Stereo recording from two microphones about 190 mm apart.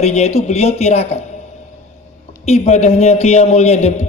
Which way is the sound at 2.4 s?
35° left (ahead or behind).